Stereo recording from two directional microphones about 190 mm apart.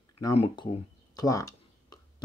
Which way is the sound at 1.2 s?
20° left (ahead or behind).